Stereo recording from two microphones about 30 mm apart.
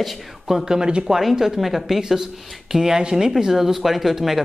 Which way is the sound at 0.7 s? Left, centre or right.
Right.